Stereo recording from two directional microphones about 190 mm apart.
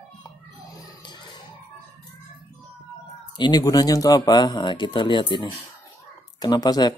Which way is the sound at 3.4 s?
20° left (ahead or behind).